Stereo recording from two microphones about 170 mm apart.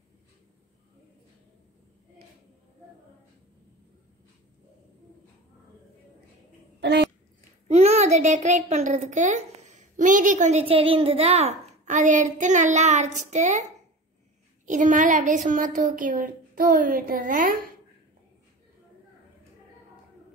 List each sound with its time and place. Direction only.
6.8 s a sound: 85° right
7.6 s a child's voice: 40° right (ahead or behind)
14.7 s a woman's voice: 50° right (ahead or behind)